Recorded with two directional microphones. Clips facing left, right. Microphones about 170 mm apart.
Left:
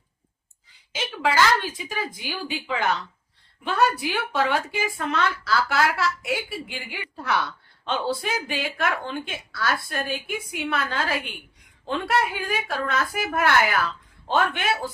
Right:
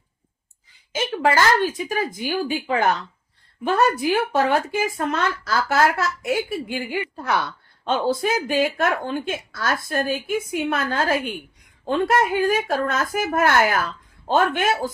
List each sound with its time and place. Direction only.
0.9 s speech: 50° right (ahead or behind)